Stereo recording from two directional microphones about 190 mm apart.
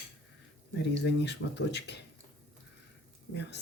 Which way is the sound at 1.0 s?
65° left (ahead or behind).